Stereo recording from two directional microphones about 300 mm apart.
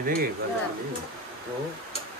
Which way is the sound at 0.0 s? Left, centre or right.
Right.